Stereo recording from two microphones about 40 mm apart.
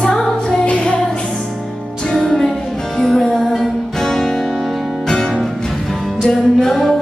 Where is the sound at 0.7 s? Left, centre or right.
Left.